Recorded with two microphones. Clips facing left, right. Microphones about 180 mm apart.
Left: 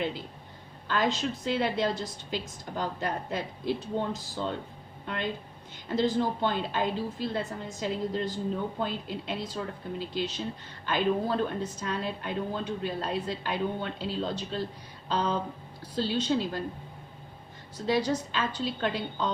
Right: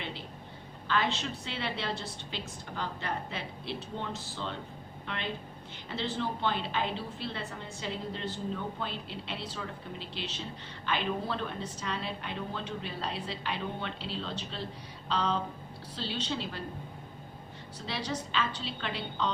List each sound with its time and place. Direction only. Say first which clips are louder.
0.9 s a woman's voice: left 3 dB; 40° left (ahead or behind)
5.9 s a woman's voice: left 7 dB; 40° left (ahead or behind)
17.7 s a woman's voice: left 9 dB; 40° left (ahead or behind)